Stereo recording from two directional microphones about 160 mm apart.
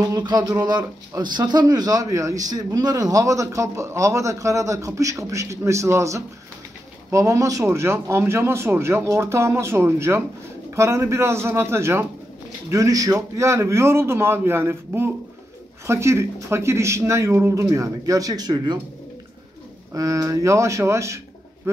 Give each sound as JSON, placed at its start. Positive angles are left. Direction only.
{"t": 0.1, "sound": "speech", "side_deg": -25}
{"t": 19.9, "sound": "speech", "side_deg": -20}